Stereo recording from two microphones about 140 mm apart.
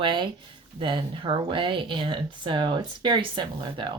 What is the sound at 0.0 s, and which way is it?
Speech, 35° right (ahead or behind).